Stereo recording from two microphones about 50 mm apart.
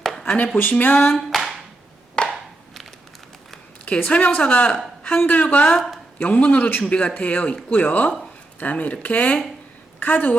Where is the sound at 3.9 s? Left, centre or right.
Left.